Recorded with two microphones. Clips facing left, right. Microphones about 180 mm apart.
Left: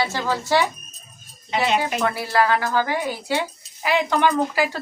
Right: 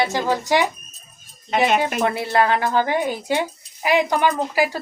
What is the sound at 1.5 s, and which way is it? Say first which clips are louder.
Speech: right 3 dB; 50° right (ahead or behind).